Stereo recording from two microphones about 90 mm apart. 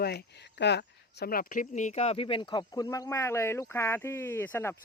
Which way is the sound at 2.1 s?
75° left (ahead or behind).